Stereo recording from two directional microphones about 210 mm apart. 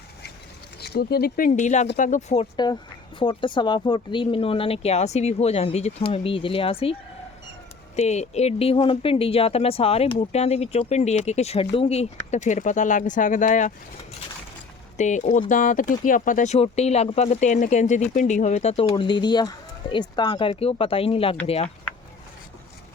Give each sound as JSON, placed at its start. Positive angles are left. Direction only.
{"t": 0.8, "sound": "speech", "side_deg": 50}
{"t": 7.9, "sound": "speech", "side_deg": 30}
{"t": 14.9, "sound": "speech", "side_deg": 35}